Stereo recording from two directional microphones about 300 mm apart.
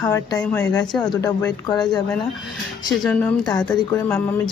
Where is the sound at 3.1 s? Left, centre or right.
Centre.